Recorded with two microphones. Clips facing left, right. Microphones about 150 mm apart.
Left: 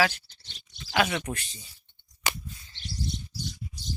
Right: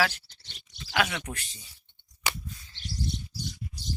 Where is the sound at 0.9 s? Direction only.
Centre (ahead or behind).